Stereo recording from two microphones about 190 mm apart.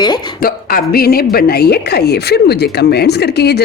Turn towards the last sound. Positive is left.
turn(degrees=60)  # may be behind; listen again after turning